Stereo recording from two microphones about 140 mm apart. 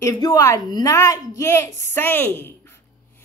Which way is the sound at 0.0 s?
25° left (ahead or behind).